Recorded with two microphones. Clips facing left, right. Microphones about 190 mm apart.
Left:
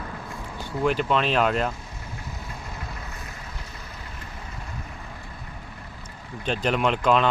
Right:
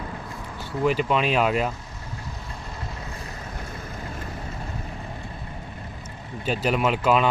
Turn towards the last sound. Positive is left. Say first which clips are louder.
# even
turn(degrees=-5)  # may be behind; listen again after turning